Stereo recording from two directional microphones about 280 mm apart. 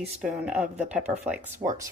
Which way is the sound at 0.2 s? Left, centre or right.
Centre.